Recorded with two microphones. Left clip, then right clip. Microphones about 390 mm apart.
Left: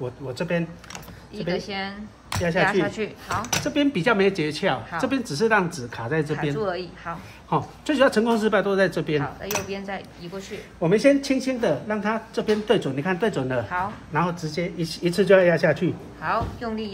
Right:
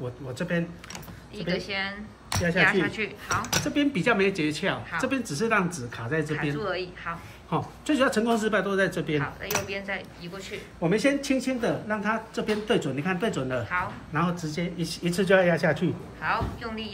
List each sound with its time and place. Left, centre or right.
0.3 s a woman's voice: left
1.5 s speech: centre
3.6 s a woman's voice: centre
6.5 s speech: centre
7.4 s a woman's voice: centre
9.2 s speech: centre
10.8 s a woman's voice: left